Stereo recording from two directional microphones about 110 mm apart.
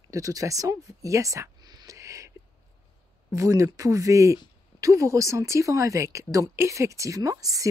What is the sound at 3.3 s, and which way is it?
A woman's voice, 30° right (ahead or behind).